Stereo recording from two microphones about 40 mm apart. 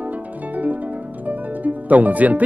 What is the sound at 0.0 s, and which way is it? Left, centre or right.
Harp, right.